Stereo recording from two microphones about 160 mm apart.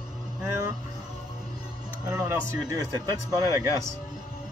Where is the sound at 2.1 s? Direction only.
20° right (ahead or behind).